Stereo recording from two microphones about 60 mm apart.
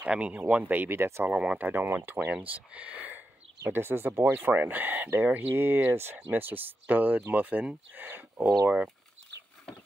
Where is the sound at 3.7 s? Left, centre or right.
Right.